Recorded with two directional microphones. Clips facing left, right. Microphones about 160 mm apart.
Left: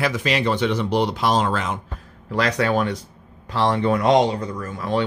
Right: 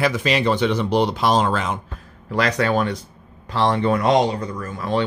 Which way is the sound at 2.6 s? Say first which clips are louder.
Right 1 dB; 10° left (ahead or behind).